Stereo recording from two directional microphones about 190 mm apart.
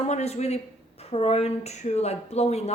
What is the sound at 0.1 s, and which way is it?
A woman's voice, 35° left (ahead or behind).